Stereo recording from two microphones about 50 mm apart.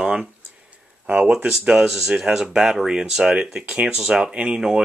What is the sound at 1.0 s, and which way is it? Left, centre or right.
Speech, right.